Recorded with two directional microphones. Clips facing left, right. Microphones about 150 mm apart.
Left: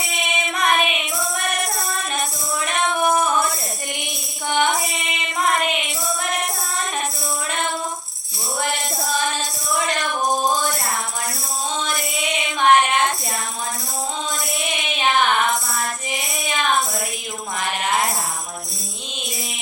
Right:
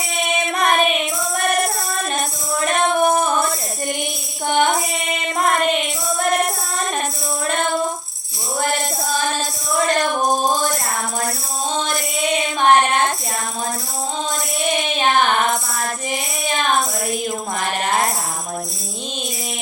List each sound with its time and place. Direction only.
0.2 s music: 40° right (ahead or behind)
4.4 s music: 40° right (ahead or behind)
8.6 s tambourine: 40° right (ahead or behind)
9.8 s music: 35° right (ahead or behind)
11.8 s a sound: 35° right (ahead or behind)
14.6 s child singing: 35° right (ahead or behind)
16.5 s child singing: 40° right (ahead or behind)
17.6 s tambourine: 40° right (ahead or behind)